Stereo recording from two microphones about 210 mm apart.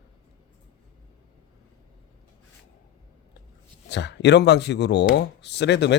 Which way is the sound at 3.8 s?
55° left (ahead or behind).